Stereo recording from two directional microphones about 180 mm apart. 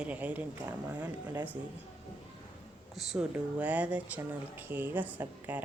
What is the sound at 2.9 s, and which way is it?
Speech, centre (ahead or behind).